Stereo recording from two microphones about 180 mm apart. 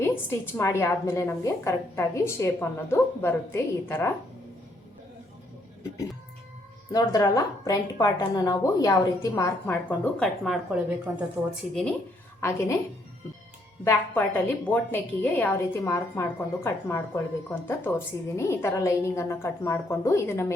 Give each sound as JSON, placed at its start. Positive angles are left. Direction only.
{"t": 0.0, "sound": "a woman's voice", "side_deg": 15}
{"t": 6.9, "sound": "a woman's voice", "side_deg": 20}
{"t": 12.4, "sound": "a woman's voice", "side_deg": 15}
{"t": 13.8, "sound": "a woman's voice", "side_deg": 10}